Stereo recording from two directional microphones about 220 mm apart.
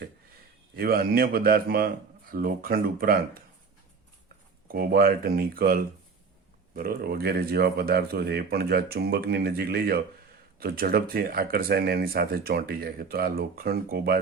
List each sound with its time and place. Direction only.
0.8 s speech: 40° right (ahead or behind)
4.7 s speech: 40° right (ahead or behind)